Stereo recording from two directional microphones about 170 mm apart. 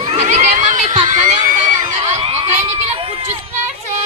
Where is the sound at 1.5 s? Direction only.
45° right (ahead or behind).